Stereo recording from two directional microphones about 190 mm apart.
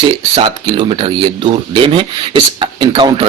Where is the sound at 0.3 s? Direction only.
25° right (ahead or behind).